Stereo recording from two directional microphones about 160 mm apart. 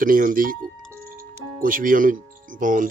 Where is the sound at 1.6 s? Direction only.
60° right (ahead or behind).